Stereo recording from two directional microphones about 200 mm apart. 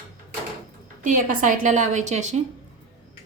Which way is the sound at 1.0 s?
40° right (ahead or behind).